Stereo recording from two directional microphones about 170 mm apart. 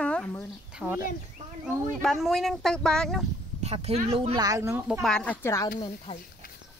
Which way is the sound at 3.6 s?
40° right (ahead or behind).